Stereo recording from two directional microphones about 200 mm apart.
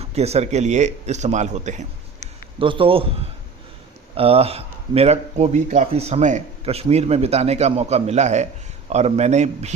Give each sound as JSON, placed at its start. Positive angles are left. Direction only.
{"t": 0.0, "sound": "speech", "side_deg": -30}
{"t": 2.6, "sound": "a man's voice", "side_deg": -25}